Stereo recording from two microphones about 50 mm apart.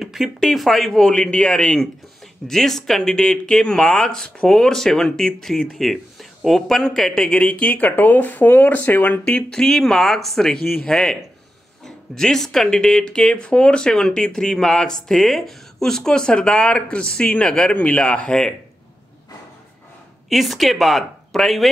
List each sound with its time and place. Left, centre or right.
0.0 s speech: centre
1.1 s speech: centre
7.4 s speech: left
9.2 s speech: left
9.6 s speech: centre
20.2 s speech: centre